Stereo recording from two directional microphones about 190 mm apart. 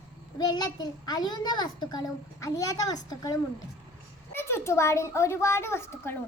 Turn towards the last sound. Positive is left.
turn(degrees=15)  # may be behind; listen again after turning